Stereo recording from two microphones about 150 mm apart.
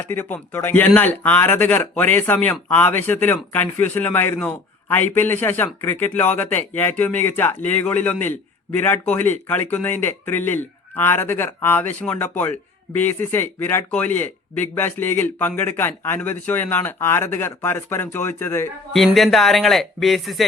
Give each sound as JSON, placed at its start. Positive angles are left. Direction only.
{"t": 0.0, "sound": "a man's voice", "side_deg": 10}
{"t": 18.9, "sound": "speech", "side_deg": 0}